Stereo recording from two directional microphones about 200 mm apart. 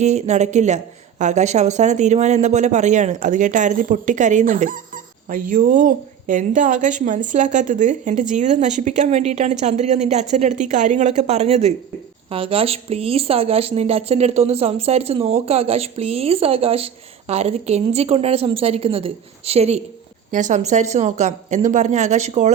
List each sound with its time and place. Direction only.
0.0 s speech: 35° right (ahead or behind)